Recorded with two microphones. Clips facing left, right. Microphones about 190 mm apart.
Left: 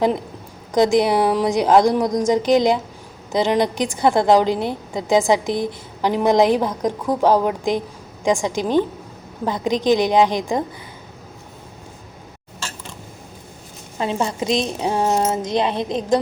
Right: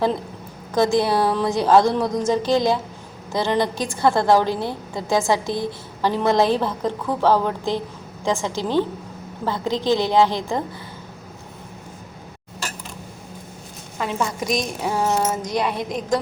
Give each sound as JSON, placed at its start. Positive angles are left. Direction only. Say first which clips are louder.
{"t": 0.7, "sound": "a woman's voice", "louder": "left 3 dB", "side_deg": 15}
{"t": 14.0, "sound": "a woman's voice", "louder": "left 3 dB", "side_deg": 25}